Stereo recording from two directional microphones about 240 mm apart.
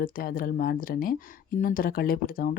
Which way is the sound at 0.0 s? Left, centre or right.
Left.